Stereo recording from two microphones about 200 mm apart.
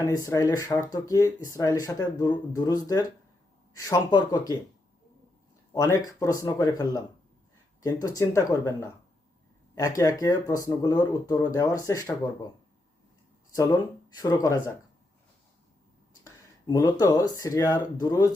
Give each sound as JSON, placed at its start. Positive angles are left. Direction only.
{"t": 0.0, "sound": "speech", "side_deg": 15}
{"t": 5.7, "sound": "speech", "side_deg": 15}
{"t": 8.0, "sound": "speech", "side_deg": 15}
{"t": 10.0, "sound": "speech", "side_deg": 15}
{"t": 13.6, "sound": "speech", "side_deg": 20}
{"t": 16.2, "sound": "speech", "side_deg": 15}